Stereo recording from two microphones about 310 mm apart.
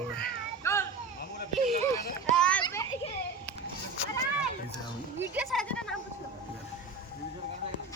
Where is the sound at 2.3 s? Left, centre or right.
Centre.